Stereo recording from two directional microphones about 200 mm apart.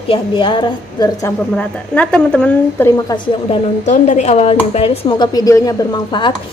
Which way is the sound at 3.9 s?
35° left (ahead or behind).